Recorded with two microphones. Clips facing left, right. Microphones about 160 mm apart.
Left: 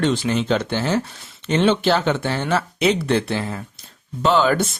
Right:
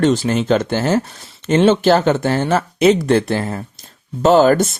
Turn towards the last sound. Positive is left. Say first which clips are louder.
# right 6 dB
turn(degrees=-45)  # may be behind; listen again after turning